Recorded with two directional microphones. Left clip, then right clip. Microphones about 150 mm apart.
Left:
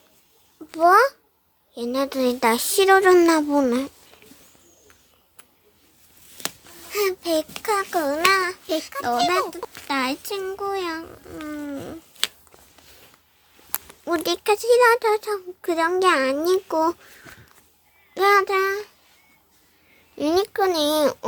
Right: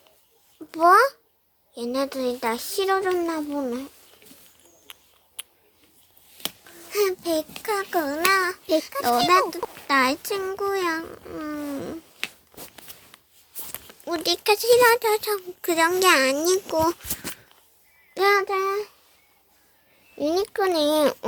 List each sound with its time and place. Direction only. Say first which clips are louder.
0.7 s a child's voice: left 1 dB; 5° right (ahead or behind)
2.1 s speech: left 6 dB; 30° left (ahead or behind)
3.1 s speech: left 10 dB; 45° left (ahead or behind)
6.9 s a child's voice: left 1 dB; 5° left (ahead or behind)
8.4 s a child's voice: right 2 dB; centre (ahead or behind)
14.0 s a child's voice: left 1 dB; 20° left (ahead or behind); by 17.0 s centre (ahead or behind)
18.1 s a child's voice: left 3 dB; 5° right (ahead or behind)
20.1 s a child's voice: left 3 dB; centre (ahead or behind)